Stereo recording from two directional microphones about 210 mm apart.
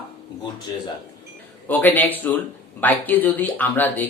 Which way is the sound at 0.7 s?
20° left (ahead or behind).